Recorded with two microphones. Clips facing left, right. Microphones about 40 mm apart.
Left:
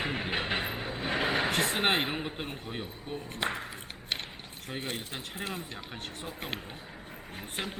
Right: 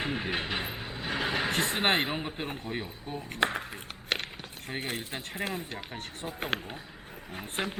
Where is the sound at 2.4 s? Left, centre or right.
Right.